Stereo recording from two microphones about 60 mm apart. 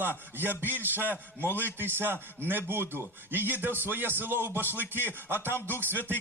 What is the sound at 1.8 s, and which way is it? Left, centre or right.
Speech, right.